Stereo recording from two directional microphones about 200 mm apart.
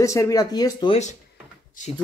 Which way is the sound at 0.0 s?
15° left (ahead or behind).